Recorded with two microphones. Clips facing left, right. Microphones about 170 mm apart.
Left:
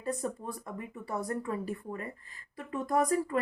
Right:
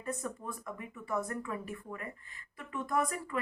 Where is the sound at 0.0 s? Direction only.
30° left (ahead or behind).